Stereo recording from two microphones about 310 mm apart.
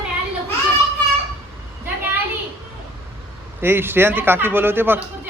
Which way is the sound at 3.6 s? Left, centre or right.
Centre.